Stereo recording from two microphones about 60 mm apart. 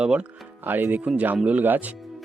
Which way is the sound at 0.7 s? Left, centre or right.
Right.